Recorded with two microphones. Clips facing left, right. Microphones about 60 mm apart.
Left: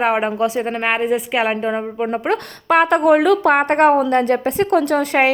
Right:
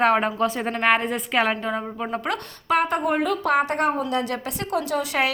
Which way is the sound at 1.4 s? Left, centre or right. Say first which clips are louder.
Left 5 dB; left.